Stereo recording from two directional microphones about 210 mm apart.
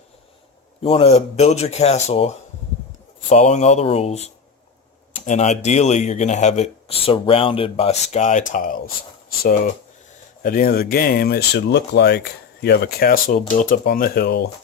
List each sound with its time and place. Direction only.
0.8 s speech: 25° left (ahead or behind)
10.4 s speech: 45° left (ahead or behind)